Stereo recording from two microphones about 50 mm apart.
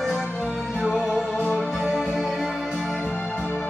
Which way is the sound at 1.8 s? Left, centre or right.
Centre.